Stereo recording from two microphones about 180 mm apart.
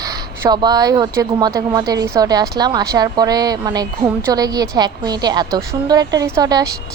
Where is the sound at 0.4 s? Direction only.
20° right (ahead or behind).